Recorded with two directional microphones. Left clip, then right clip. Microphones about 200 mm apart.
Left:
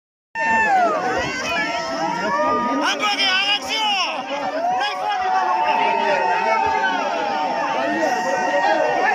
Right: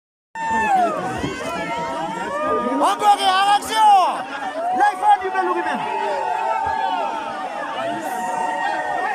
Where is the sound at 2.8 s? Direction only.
40° right (ahead or behind).